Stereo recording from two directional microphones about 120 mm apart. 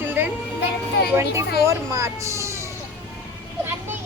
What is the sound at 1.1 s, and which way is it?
Speech, 25° right (ahead or behind).